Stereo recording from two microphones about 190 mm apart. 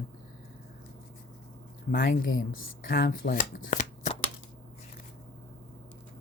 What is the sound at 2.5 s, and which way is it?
Speech, 50° left (ahead or behind).